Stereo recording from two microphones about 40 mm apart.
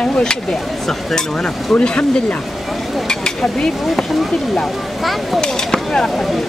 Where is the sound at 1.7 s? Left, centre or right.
Left.